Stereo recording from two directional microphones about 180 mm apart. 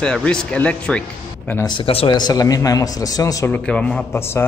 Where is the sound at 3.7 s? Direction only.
5° left (ahead or behind).